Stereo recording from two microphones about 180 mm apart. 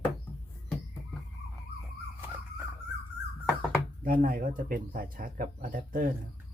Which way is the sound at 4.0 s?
50° right (ahead or behind).